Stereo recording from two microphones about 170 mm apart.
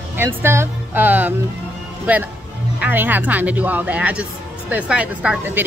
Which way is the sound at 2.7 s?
10° right (ahead or behind).